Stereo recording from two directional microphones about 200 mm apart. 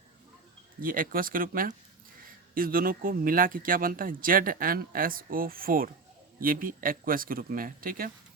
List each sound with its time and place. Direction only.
0.8 s speech: 45° right (ahead or behind)